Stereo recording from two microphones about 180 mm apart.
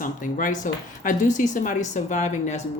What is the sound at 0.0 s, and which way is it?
A woman's voice, 50° left (ahead or behind).